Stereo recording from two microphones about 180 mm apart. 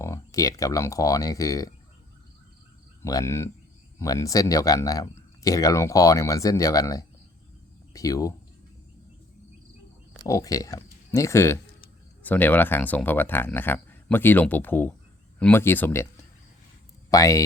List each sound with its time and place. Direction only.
0.0 s speech: 15° left (ahead or behind)
3.0 s speech: 15° left (ahead or behind)
10.2 s speech: 20° left (ahead or behind)
17.1 s speech: 20° left (ahead or behind)